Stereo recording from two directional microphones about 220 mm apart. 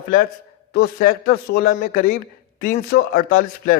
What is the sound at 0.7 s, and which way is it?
A man's voice, 45° left (ahead or behind).